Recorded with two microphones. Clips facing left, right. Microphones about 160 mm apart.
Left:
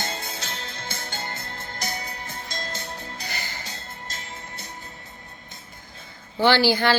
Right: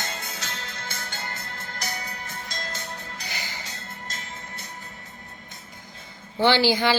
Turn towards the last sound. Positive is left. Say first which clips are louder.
# left 1 dB
turn(degrees=-15)  # may be behind; listen again after turning